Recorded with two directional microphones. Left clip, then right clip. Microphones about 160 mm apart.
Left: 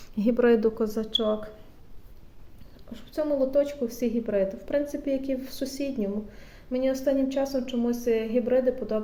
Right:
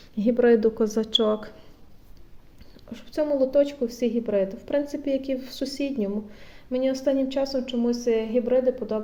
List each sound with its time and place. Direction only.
0.2 s speech: 5° right (ahead or behind)
0.9 s speech: 45° right (ahead or behind)
2.9 s a woman's voice: 45° right (ahead or behind); by 9.0 s 20° right (ahead or behind)